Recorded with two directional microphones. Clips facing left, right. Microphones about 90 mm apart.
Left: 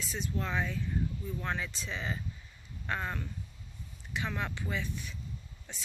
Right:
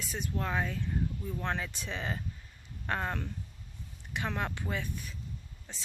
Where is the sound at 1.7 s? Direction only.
55° right (ahead or behind).